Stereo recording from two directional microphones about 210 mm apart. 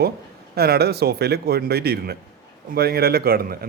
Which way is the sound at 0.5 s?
50° right (ahead or behind).